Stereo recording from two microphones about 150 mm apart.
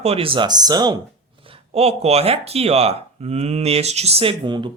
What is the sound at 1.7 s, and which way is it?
Speech, 45° right (ahead or behind).